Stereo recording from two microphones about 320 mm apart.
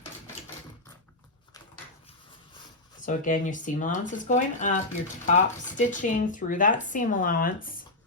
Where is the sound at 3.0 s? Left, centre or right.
Left.